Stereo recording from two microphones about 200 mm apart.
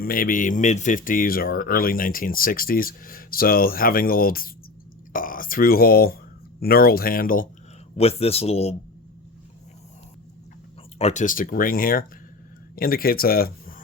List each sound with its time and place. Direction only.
0.0 s speech: 45° left (ahead or behind)
7.9 s speech: 30° left (ahead or behind)
10.9 s speech: 35° left (ahead or behind)